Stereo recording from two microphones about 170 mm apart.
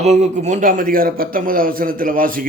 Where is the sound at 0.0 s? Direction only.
40° right (ahead or behind).